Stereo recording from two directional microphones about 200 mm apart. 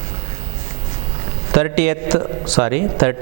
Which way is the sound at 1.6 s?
10° right (ahead or behind).